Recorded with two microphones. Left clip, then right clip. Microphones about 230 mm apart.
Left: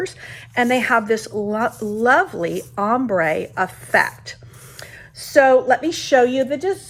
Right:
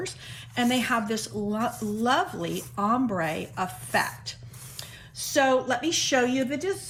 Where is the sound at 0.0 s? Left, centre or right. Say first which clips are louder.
Left 8 dB; centre.